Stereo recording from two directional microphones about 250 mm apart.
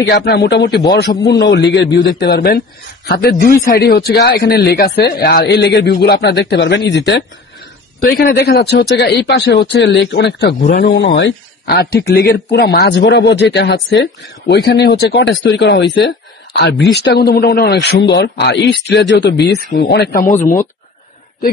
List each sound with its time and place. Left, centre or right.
0.0 s speech: left